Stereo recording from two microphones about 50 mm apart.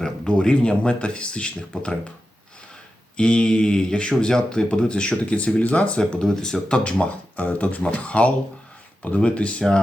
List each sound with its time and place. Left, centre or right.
0.0 s speech: centre
3.2 s speech: centre
6.0 s speech: centre
6.7 s speech: left